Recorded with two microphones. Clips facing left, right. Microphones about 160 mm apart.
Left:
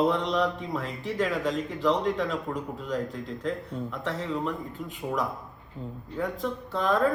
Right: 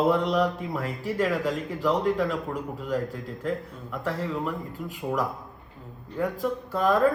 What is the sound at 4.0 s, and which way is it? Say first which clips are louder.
A man's voice: right 3 dB; 5° right (ahead or behind).